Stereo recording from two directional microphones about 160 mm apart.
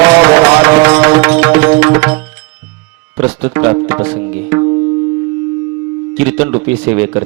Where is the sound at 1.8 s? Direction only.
10° right (ahead or behind).